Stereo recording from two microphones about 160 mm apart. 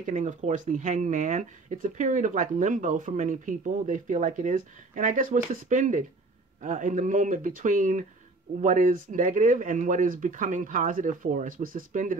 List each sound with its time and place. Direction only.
0.0 s speech: 50° right (ahead or behind)